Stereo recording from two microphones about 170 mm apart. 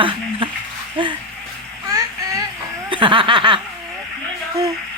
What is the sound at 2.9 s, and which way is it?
Snicker, 30° right (ahead or behind).